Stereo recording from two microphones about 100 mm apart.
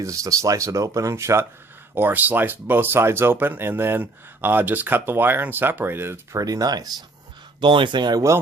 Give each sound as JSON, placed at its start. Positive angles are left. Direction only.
{"t": 0.0, "sound": "speech", "side_deg": -35}
{"t": 6.4, "sound": "speech", "side_deg": -40}
{"t": 7.6, "sound": "speech", "side_deg": -55}